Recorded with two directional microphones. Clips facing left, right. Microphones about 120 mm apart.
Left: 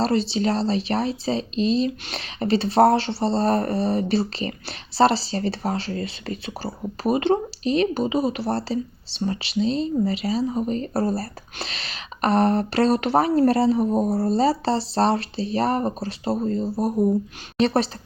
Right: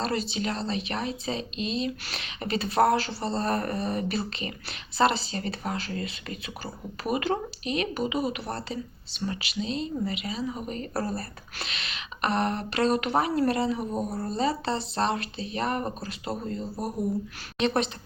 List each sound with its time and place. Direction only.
0.0 s speech: 30° left (ahead or behind)